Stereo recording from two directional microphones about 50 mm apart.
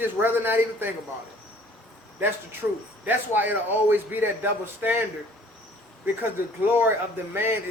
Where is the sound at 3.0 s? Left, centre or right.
Right.